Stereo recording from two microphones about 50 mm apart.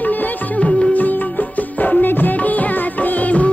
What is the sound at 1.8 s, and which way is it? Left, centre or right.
Music of bollywood, left.